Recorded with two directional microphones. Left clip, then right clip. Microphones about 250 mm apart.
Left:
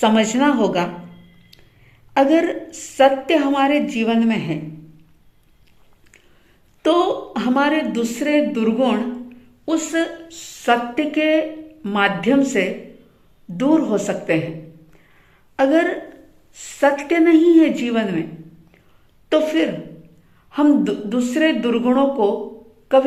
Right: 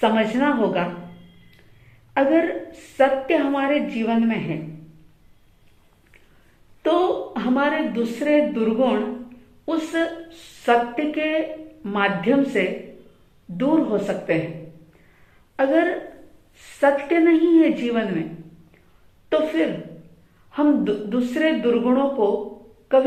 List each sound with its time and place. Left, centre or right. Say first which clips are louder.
0.0 s a woman's voice: left 3 dB; left
2.1 s a woman's voice: left 3 dB; left
6.8 s a woman's voice: left 3 dB; left
15.5 s a woman's voice: left 3 dB; left
20.5 s a woman's voice: left 3 dB; left